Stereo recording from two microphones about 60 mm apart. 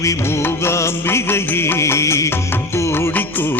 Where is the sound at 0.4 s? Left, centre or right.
Left.